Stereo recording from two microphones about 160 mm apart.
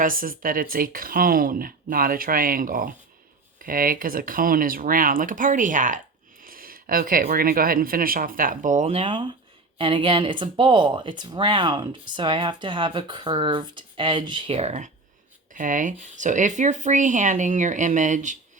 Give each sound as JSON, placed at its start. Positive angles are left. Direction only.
{"t": 0.0, "sound": "speech", "side_deg": -60}
{"t": 15.5, "sound": "speech", "side_deg": -55}